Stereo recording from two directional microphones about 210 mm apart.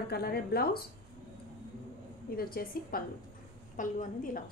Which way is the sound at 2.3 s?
45° left (ahead or behind).